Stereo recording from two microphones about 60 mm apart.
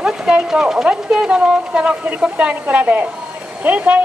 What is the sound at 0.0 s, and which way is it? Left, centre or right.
Speech, centre.